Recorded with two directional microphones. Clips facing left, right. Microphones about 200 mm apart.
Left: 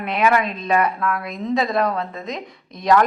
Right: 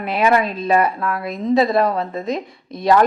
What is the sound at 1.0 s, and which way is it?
Speech, 30° right (ahead or behind).